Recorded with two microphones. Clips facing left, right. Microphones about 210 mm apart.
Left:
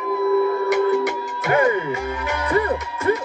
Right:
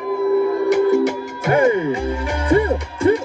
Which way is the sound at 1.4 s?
30° right (ahead or behind).